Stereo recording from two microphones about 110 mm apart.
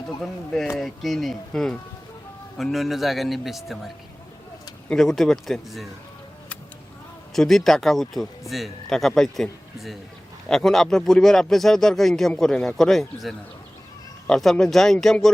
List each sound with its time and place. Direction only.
0.2 s speech: 5° left (ahead or behind)
4.9 s speech: 5° left (ahead or behind)
7.3 s speech: 5° left (ahead or behind)